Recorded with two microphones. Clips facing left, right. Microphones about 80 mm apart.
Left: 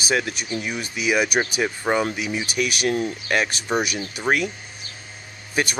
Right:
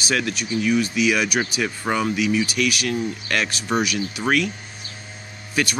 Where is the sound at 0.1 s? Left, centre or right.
Left.